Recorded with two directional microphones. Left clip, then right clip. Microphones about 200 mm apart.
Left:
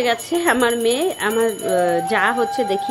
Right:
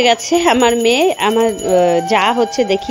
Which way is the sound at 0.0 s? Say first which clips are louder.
Right 6 dB; 30° right (ahead or behind).